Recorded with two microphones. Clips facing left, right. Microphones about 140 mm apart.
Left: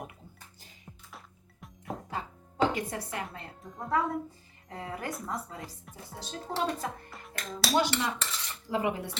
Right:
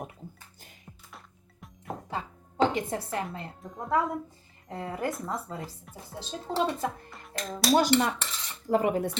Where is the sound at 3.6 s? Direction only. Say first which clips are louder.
Right 2 dB; centre (ahead or behind).